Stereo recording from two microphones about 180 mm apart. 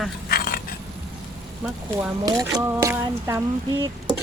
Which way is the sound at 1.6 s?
10° right (ahead or behind).